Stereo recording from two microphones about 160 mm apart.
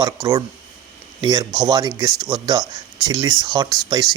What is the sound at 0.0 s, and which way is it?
Speech, 20° right (ahead or behind).